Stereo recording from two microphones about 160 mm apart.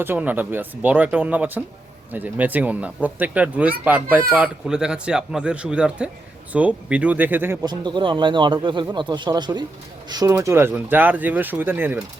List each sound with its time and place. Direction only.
0.0 s speech: 10° right (ahead or behind)
7.6 s speech: 25° right (ahead or behind); by 12.0 s 10° right (ahead or behind)